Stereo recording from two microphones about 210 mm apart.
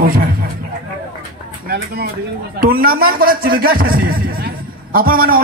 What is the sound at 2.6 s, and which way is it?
Speech, 45° right (ahead or behind).